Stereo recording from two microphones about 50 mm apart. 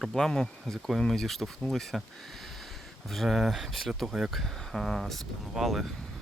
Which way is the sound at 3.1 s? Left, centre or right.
Centre.